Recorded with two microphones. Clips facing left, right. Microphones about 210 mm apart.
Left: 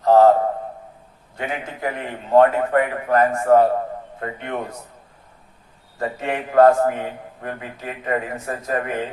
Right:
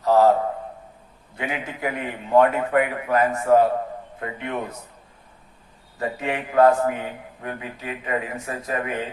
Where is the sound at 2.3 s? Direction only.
45° left (ahead or behind).